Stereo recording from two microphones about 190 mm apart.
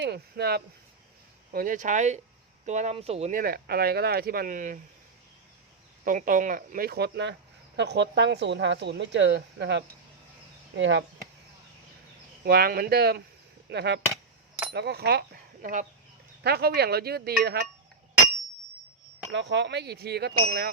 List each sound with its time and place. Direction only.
0.0 s speech: 60° right (ahead or behind)
1.5 s speech: 45° right (ahead or behind)
3.4 s speech: 55° right (ahead or behind)
6.1 s speech: 45° right (ahead or behind); by 11.0 s 75° right (ahead or behind)
12.5 s speech: 55° right (ahead or behind)
15.6 s speech: 40° right (ahead or behind)
16.4 s speech: 55° right (ahead or behind)
19.3 s speech: 65° right (ahead or behind)